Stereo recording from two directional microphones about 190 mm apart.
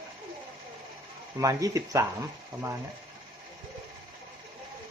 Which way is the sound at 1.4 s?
15° right (ahead or behind).